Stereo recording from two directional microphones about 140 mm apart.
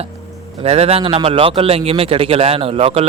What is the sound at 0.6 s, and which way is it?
A man's voice, 45° right (ahead or behind).